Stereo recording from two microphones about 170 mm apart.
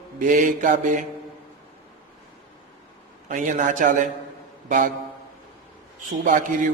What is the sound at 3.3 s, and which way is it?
A man's voice, 50° right (ahead or behind).